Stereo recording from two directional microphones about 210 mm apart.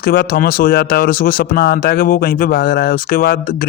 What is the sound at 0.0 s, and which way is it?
Speech, 45° left (ahead or behind).